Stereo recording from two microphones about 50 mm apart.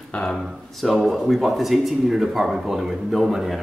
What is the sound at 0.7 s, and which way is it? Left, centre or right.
A man's voice, centre.